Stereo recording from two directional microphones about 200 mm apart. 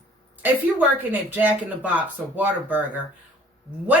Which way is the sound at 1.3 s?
10° right (ahead or behind).